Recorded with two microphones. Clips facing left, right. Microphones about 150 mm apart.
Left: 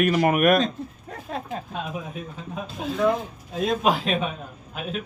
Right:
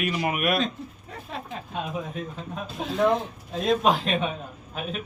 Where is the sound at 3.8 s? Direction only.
5° left (ahead or behind).